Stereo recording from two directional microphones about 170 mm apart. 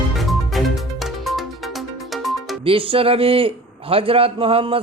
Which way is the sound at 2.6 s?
30° right (ahead or behind).